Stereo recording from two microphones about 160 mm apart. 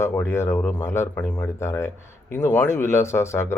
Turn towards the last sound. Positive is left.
turn(degrees=15)  # may be behind; listen again after turning